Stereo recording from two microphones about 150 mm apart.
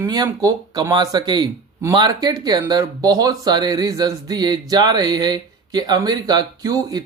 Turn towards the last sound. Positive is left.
turn(degrees=-25)  # may be behind; listen again after turning